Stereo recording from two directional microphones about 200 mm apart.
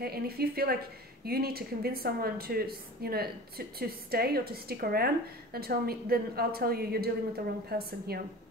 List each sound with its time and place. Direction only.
0.0 s speech: 50° right (ahead or behind)